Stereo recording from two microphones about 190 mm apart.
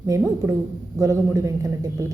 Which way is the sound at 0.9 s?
15° right (ahead or behind).